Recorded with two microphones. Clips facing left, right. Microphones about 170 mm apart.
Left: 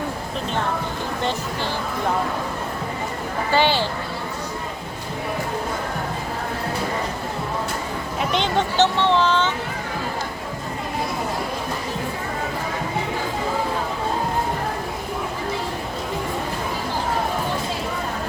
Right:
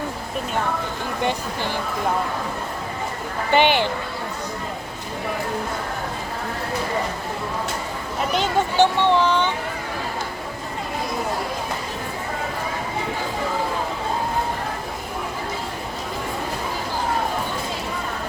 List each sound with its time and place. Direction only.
1.2 s speech: 15° right (ahead or behind)
3.5 s speech: 20° right (ahead or behind)
8.4 s speech: 10° right (ahead or behind)